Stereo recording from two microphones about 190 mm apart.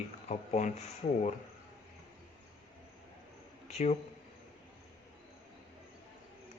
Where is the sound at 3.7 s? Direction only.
35° left (ahead or behind).